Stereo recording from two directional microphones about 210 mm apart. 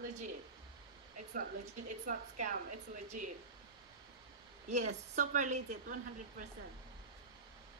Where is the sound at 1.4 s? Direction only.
40° right (ahead or behind).